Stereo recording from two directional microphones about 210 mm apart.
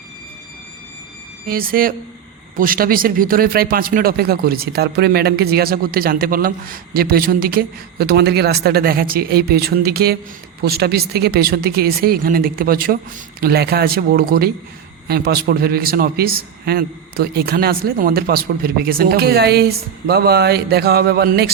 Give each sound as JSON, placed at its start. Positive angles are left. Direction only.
{"t": 1.5, "sound": "speech", "side_deg": -45}